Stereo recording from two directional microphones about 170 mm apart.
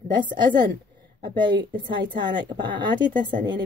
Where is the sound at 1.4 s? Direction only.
25° right (ahead or behind).